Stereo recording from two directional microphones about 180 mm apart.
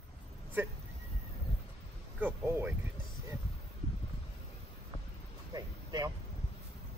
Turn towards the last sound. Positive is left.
turn(degrees=-20)  # may be behind; listen again after turning